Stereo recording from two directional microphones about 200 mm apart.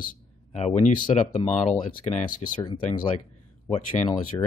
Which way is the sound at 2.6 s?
25° left (ahead or behind).